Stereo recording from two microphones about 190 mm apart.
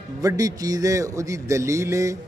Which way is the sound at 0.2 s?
20° right (ahead or behind).